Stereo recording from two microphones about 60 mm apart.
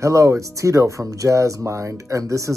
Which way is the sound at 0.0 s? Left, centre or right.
Right.